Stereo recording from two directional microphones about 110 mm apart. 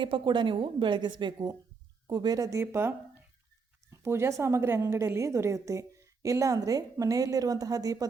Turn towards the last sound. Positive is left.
turn(degrees=-30)  # may be behind; listen again after turning